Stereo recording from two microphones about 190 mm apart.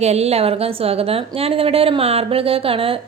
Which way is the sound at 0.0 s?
35° right (ahead or behind).